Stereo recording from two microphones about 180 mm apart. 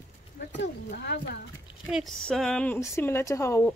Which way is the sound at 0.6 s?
65° left (ahead or behind).